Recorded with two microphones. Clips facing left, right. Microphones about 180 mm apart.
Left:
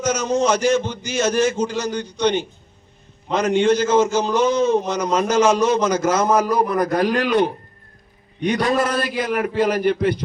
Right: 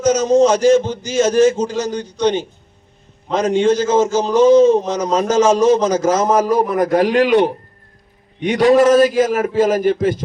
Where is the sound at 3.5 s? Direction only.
45° right (ahead or behind).